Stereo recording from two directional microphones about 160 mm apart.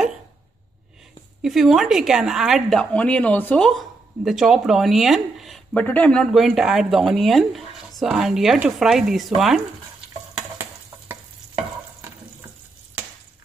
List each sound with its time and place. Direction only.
1.4 s a woman's voice: centre (ahead or behind)
10.3 s stir: 10° right (ahead or behind)